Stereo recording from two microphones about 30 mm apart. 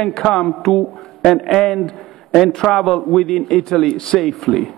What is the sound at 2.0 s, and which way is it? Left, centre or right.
A man's voice, centre.